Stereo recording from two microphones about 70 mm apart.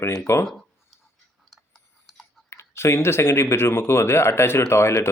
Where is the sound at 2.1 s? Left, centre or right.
Centre.